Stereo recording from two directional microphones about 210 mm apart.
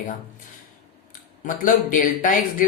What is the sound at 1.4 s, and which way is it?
Speech, 40° left (ahead or behind).